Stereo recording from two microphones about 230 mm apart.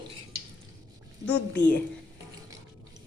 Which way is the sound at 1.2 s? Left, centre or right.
Centre.